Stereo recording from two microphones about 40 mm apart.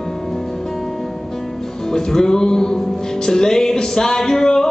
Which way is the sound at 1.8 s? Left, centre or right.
Centre.